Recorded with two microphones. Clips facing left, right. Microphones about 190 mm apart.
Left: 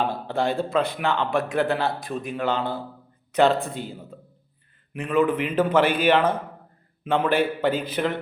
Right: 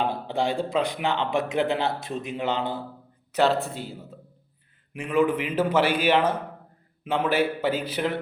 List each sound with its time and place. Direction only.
0.0 s a man's voice: 15° right (ahead or behind)
3.3 s a man's voice: centre (ahead or behind)